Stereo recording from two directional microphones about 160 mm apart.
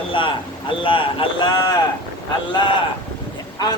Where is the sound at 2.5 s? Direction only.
30° left (ahead or behind).